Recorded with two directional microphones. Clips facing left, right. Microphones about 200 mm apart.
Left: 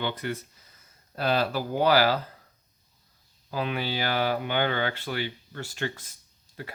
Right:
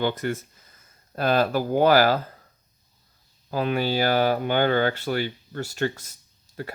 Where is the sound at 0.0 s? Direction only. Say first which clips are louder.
Right 5 dB; 45° right (ahead or behind).